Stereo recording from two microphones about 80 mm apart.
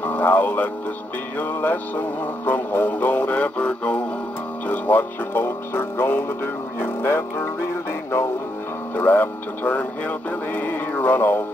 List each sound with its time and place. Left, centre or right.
0.0 s music: left
4.6 s speech: left
8.9 s music: left